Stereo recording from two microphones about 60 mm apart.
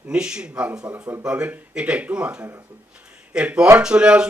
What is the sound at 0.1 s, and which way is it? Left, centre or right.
A man's voice, centre.